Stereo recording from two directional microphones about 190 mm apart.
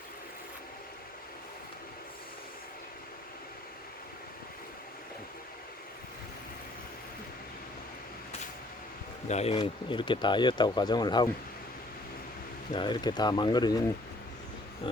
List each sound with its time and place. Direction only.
9.3 s speech: 35° left (ahead or behind)
12.7 s speech: 25° left (ahead or behind)